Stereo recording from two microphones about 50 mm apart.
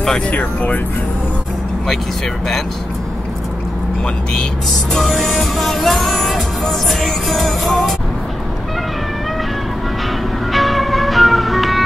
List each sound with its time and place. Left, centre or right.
0.3 s speech: left
5.0 s music: centre
10.5 s music: centre